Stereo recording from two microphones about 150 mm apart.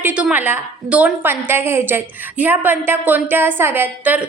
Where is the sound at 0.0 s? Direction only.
10° right (ahead or behind).